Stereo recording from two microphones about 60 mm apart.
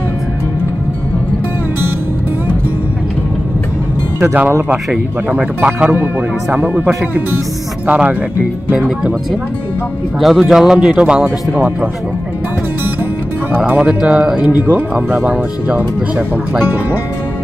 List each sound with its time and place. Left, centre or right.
4.2 s speech: right
5.3 s speech: right
8.7 s speech: centre
10.2 s speech: centre
11.2 s speech: right
13.8 s speech: centre
14.6 s speech: right